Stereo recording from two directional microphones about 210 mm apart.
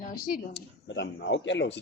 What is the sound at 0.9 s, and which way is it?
Speech, 55° left (ahead or behind).